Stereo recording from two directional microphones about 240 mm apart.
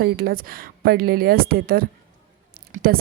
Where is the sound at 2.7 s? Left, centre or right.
Right.